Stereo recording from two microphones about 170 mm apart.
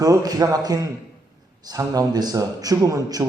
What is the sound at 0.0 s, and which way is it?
A man's voice, 20° right (ahead or behind).